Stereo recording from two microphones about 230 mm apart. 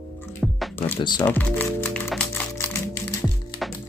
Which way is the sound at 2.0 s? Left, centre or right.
Centre.